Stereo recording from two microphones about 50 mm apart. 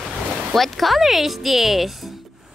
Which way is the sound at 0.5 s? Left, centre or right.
Centre.